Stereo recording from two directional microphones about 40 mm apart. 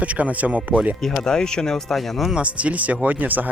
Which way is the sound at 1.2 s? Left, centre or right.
Centre.